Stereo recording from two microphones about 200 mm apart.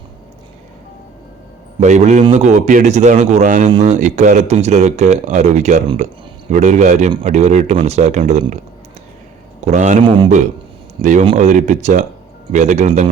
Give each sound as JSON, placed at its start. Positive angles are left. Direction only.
{"t": 1.8, "sound": "speech", "side_deg": -35}
{"t": 9.6, "sound": "a man's voice", "side_deg": -35}
{"t": 10.1, "sound": "speech", "side_deg": -25}
{"t": 11.0, "sound": "speech", "side_deg": -40}